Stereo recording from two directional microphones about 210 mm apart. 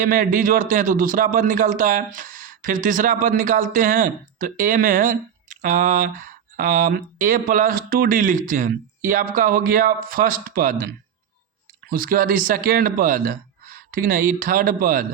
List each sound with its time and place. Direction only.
0.0 s a man's voice: 40° right (ahead or behind)
11.9 s a man's voice: 40° right (ahead or behind)